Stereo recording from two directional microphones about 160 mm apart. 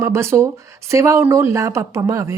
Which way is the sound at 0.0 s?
15° right (ahead or behind).